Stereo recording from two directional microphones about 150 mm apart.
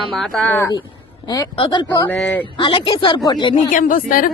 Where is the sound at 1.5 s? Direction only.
30° left (ahead or behind).